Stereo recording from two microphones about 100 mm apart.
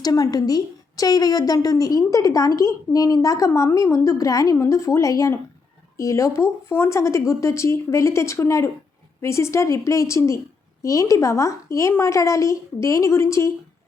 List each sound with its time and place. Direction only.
0.0 s a woman's voice: 40° left (ahead or behind)